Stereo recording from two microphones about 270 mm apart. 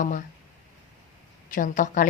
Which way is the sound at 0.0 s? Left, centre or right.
Left.